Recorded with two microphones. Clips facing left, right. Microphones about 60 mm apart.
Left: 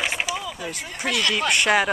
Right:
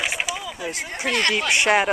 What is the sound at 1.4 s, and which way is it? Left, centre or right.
Speech, centre.